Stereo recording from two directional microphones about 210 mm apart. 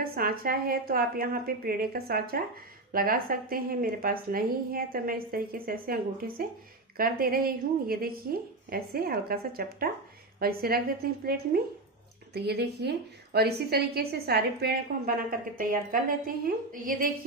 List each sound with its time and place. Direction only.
0.0 s a woman's voice: 45° right (ahead or behind)
12.4 s a woman's voice: 50° right (ahead or behind)